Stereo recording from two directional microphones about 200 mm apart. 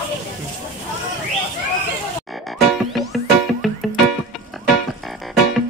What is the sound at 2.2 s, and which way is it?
Music, centre (ahead or behind).